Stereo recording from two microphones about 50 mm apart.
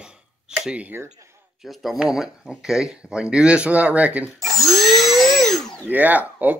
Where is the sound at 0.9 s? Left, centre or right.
Right.